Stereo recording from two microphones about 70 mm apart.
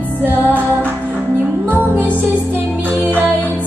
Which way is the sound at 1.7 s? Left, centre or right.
Right.